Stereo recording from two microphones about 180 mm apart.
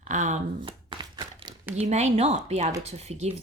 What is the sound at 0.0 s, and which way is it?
Speech, 40° right (ahead or behind).